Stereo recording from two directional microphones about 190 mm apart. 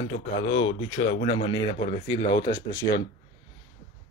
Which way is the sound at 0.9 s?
35° left (ahead or behind).